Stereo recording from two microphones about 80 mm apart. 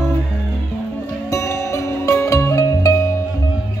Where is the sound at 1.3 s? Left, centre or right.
Left.